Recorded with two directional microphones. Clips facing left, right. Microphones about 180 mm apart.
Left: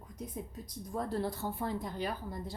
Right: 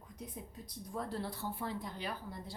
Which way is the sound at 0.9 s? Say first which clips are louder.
Left 5 dB; 45° left (ahead or behind).